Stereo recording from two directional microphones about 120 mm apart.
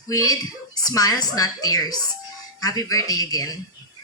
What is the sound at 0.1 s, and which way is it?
Speech, 30° left (ahead or behind).